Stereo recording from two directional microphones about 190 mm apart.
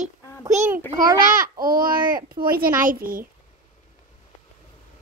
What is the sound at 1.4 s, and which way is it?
Speech, 50° right (ahead or behind).